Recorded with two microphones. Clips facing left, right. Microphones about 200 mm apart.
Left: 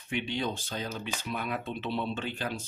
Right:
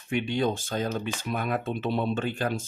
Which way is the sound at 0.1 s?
45° right (ahead or behind).